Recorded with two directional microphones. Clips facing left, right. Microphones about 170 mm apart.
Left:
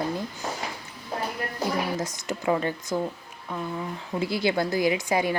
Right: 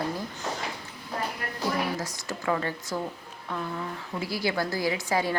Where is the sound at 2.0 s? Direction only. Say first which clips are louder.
Left 4 dB; 20° left (ahead or behind).